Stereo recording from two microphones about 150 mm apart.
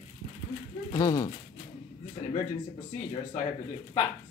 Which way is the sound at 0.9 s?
25° left (ahead or behind).